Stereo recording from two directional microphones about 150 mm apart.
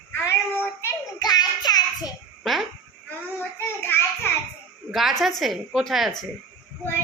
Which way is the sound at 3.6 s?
15° left (ahead or behind).